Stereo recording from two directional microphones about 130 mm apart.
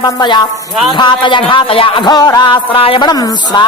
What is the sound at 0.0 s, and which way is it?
A man's voice, 35° left (ahead or behind).